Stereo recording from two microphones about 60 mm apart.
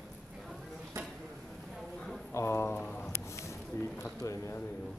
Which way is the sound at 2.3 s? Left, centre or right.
Left.